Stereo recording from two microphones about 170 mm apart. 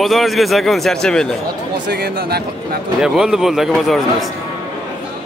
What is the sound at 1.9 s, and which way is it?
Speech, 65° right (ahead or behind).